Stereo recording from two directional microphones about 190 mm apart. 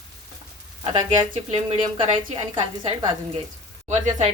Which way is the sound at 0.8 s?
25° right (ahead or behind).